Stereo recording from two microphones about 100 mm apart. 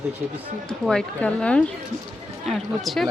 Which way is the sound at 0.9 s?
10° left (ahead or behind).